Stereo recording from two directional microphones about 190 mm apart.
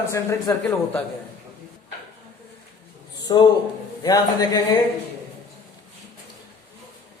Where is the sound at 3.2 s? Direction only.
20° left (ahead or behind).